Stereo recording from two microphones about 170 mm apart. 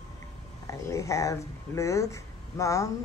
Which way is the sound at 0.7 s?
20° left (ahead or behind).